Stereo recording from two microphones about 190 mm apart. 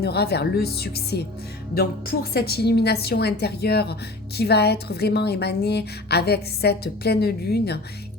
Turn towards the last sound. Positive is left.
turn(degrees=55)  # may be behind; listen again after turning